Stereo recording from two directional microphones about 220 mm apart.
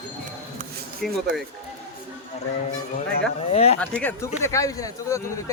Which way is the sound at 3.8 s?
5° left (ahead or behind).